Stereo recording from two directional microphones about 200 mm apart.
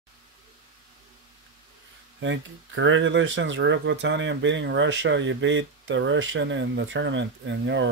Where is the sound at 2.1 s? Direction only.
70° right (ahead or behind).